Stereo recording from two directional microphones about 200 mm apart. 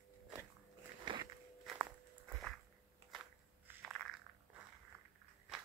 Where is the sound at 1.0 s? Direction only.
25° right (ahead or behind).